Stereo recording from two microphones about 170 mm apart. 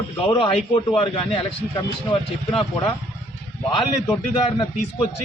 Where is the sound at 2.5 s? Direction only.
30° left (ahead or behind).